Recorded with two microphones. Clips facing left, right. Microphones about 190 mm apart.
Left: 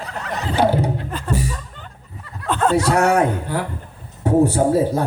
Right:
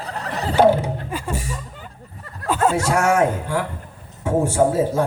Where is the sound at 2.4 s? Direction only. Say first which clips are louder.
Left 1 dB; 10° right (ahead or behind).